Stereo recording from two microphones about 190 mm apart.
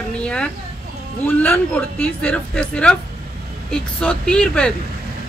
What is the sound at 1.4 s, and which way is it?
A woman's voice, 10° left (ahead or behind).